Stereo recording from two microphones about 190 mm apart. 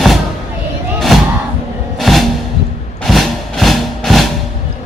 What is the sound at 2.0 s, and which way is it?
Music, centre (ahead or behind).